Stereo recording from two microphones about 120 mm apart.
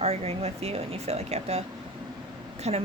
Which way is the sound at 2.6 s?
65° right (ahead or behind).